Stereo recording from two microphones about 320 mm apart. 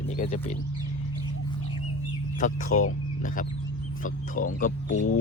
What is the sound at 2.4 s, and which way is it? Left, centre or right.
Speech, left.